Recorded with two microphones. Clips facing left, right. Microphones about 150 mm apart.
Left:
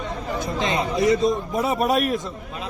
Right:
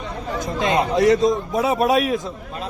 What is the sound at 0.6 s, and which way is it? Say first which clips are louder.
Speech: right 5 dB; 50° right (ahead or behind).